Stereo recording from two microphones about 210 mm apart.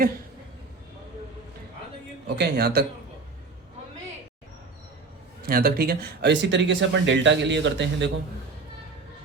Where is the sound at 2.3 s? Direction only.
50° right (ahead or behind).